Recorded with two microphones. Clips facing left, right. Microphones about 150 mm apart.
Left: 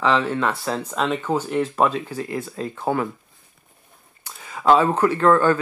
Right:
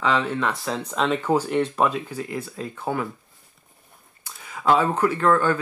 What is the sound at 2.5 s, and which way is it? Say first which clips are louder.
Speech: left 5 dB; 45° left (ahead or behind).